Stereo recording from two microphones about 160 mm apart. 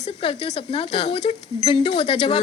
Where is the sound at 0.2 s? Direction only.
40° left (ahead or behind).